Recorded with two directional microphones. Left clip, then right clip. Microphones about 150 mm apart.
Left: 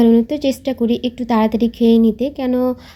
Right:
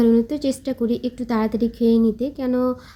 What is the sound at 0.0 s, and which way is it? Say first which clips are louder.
A woman's voice: left 4 dB; 10° left (ahead or behind).